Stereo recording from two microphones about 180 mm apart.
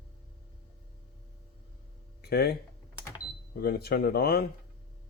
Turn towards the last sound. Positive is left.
turn(degrees=60)  # may be behind; listen again after turning